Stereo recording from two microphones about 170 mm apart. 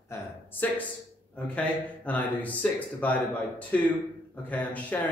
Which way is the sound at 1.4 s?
10° left (ahead or behind).